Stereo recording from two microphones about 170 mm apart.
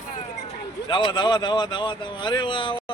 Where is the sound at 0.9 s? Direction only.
30° left (ahead or behind).